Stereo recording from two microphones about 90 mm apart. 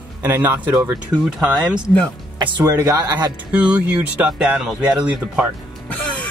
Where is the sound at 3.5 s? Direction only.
10° right (ahead or behind).